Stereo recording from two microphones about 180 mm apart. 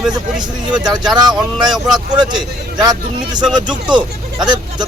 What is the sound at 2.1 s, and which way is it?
Speech, 25° right (ahead or behind).